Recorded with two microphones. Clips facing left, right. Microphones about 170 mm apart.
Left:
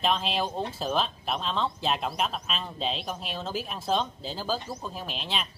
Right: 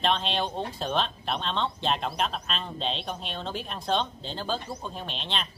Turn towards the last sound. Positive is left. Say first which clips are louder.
# even
turn(degrees=5)  # may be behind; listen again after turning